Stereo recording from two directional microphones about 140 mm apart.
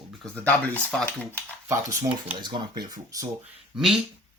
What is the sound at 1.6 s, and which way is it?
Speech, 25° right (ahead or behind).